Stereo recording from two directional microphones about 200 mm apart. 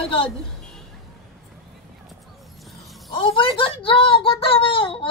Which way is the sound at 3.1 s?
25° left (ahead or behind).